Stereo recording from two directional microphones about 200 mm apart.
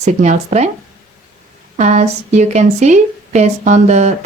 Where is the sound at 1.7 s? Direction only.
35° right (ahead or behind).